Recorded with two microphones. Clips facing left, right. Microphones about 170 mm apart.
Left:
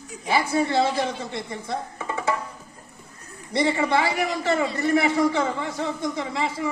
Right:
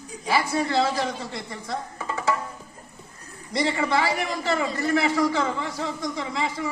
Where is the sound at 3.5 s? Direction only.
30° left (ahead or behind).